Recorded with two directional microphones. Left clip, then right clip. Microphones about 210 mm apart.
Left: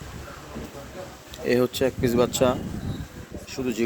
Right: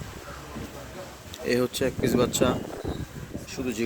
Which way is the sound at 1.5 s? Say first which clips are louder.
Left 3 dB; 40° left (ahead or behind).